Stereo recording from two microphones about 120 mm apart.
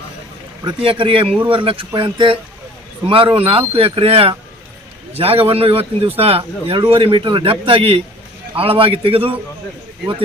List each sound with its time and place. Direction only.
0.8 s speech: 45° right (ahead or behind)